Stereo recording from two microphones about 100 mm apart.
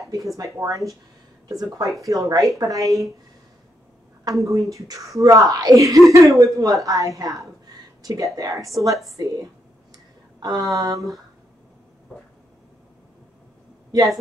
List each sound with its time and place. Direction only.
0.4 s speech: 35° right (ahead or behind)
4.2 s speech: 35° right (ahead or behind)
13.9 s speech: 40° right (ahead or behind)